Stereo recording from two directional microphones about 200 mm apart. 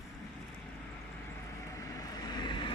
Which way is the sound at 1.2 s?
15° left (ahead or behind).